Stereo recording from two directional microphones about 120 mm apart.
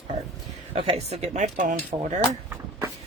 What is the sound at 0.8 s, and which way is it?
Speech, 55° right (ahead or behind).